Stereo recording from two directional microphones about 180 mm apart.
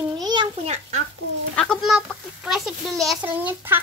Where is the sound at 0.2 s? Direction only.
25° right (ahead or behind).